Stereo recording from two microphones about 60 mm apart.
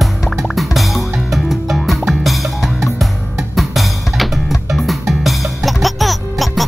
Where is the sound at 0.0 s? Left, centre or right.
Centre.